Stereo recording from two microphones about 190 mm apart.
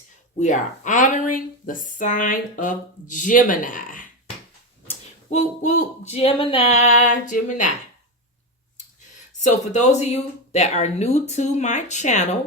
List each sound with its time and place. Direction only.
0.3 s speech: 40° left (ahead or behind)
5.3 s speech: 40° left (ahead or behind)
9.4 s speech: 40° left (ahead or behind)